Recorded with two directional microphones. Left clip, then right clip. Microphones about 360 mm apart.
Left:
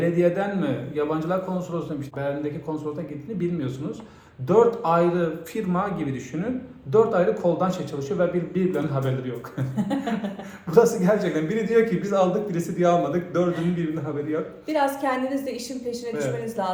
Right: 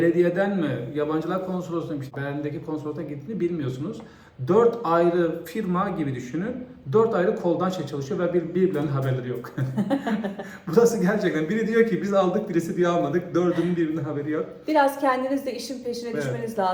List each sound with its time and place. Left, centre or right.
0.0 s a man's voice: centre
6.9 s a man's voice: centre
14.7 s a woman's voice: centre